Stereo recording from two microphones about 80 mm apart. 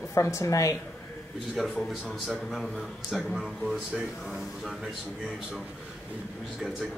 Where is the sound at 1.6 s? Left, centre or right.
Centre.